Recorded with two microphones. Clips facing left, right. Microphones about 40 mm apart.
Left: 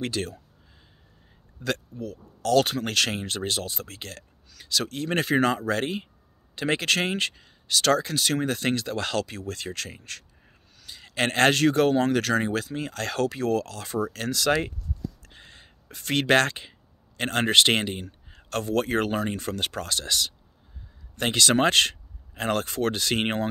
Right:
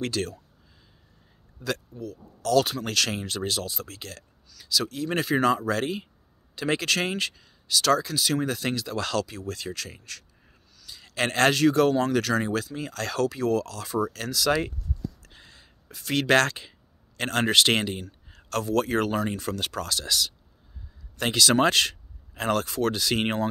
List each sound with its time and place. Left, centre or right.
0.0 s speech: left
1.6 s speech: left
15.2 s a sound: left
17.2 s speech: left
21.4 s speech: left
22.3 s speech: left
22.6 s speech: left